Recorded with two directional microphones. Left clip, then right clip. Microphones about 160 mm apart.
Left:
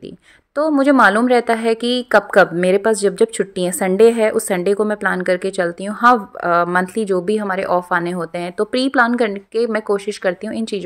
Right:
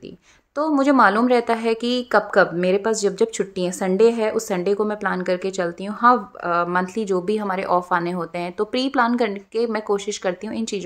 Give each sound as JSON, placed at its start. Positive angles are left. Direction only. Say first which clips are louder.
{"t": 0.6, "sound": "a woman's voice", "louder": "left 4 dB", "side_deg": 25}